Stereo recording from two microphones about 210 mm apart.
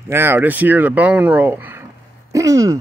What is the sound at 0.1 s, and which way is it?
Speech, 10° right (ahead or behind).